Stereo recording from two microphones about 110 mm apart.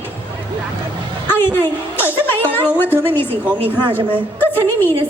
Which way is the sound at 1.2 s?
20° left (ahead or behind).